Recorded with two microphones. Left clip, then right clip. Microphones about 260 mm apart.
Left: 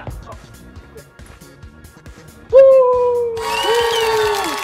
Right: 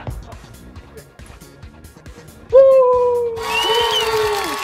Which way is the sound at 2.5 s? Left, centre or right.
Centre.